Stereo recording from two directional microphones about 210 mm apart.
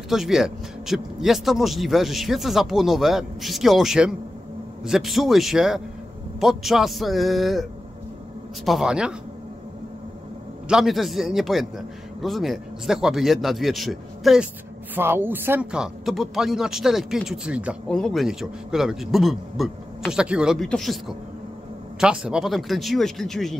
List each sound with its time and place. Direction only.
0.1 s speech: centre (ahead or behind)
8.6 s speech: centre (ahead or behind)
10.7 s speech: centre (ahead or behind)
22.0 s speech: 5° right (ahead or behind)